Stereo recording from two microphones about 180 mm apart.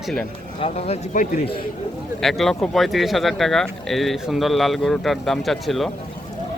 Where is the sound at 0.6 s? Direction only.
35° left (ahead or behind).